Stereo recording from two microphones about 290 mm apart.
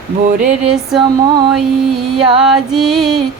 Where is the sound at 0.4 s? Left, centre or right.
Centre.